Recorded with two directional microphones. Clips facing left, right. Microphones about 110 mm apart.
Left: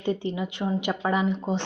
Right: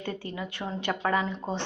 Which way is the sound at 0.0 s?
20° left (ahead or behind).